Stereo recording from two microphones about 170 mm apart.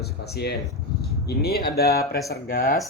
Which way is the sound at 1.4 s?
65° left (ahead or behind).